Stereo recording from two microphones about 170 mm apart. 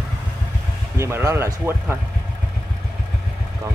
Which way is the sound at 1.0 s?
15° right (ahead or behind).